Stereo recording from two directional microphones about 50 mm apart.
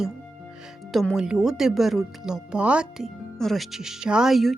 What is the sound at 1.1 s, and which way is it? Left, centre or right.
Speech, centre.